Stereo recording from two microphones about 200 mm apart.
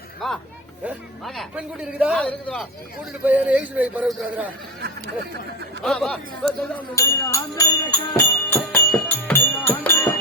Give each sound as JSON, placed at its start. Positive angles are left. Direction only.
{"t": 0.2, "sound": "a sound", "side_deg": 0}
{"t": 0.9, "sound": "speech", "side_deg": 0}
{"t": 2.2, "sound": "speech", "side_deg": 5}
{"t": 3.1, "sound": "a man's voice", "side_deg": -10}
{"t": 4.8, "sound": "speech", "side_deg": -55}
{"t": 5.8, "sound": "speech", "side_deg": 5}
{"t": 6.9, "sound": "music", "side_deg": 15}